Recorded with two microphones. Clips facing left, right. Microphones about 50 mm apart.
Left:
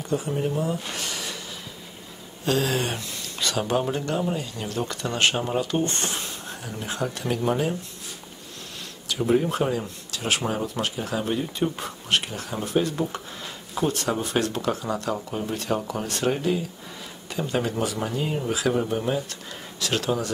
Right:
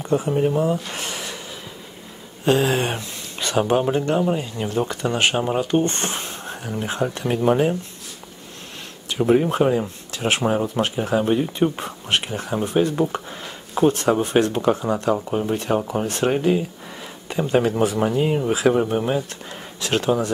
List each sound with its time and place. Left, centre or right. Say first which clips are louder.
0.0 s speech: right 6 dB; right
2.4 s speech: right 5 dB; right
9.1 s speech: right 4 dB; right